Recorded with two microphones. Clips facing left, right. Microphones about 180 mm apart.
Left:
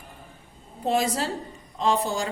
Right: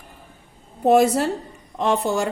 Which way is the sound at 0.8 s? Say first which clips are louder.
Right 9 dB; 60° right (ahead or behind).